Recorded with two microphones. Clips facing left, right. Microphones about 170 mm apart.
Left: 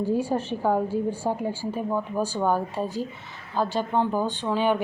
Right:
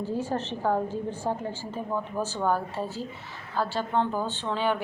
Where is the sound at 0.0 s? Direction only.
10° left (ahead or behind).